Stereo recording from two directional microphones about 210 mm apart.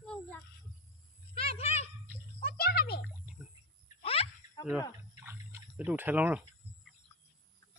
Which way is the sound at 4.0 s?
25° left (ahead or behind).